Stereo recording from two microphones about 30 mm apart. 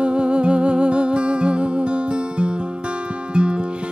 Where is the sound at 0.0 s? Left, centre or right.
Right.